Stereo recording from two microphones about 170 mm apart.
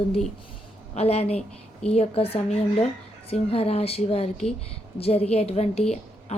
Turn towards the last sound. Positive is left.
turn(degrees=40)  # may be behind; listen again after turning